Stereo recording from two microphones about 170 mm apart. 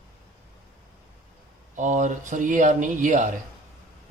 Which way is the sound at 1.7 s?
45° right (ahead or behind).